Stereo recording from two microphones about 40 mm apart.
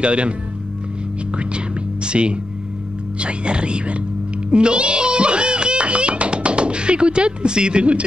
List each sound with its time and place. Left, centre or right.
0.0 s speech: right
2.0 s speech: right
4.5 s music: right